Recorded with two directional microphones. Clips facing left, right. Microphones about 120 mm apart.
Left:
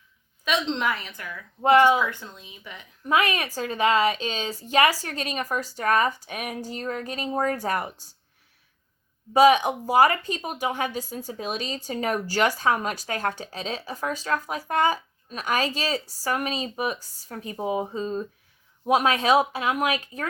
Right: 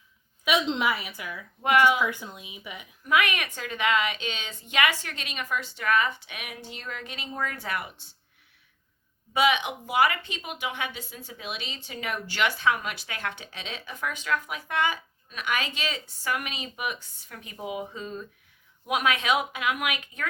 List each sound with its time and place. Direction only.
0.4 s a woman's voice: 10° right (ahead or behind)
1.6 s a woman's voice: 30° left (ahead or behind)
2.0 s a woman's voice: 10° right (ahead or behind)
3.1 s a woman's voice: 35° left (ahead or behind)
9.3 s a woman's voice: 40° left (ahead or behind)